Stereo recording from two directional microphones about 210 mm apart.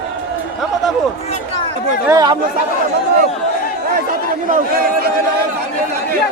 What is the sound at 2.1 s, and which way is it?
Speech, 15° right (ahead or behind).